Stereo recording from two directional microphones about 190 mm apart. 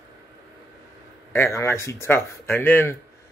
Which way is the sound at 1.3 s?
15° left (ahead or behind).